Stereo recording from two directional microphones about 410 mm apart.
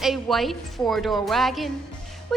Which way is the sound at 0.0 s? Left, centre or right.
Centre.